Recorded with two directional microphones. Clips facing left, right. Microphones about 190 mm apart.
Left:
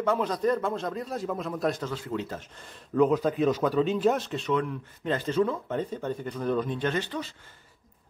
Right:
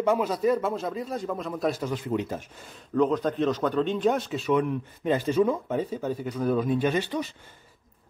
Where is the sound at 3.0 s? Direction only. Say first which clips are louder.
Left 1 dB; 5° left (ahead or behind).